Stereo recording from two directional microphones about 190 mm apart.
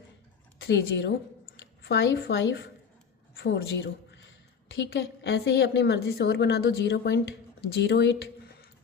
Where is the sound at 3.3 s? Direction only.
60° left (ahead or behind).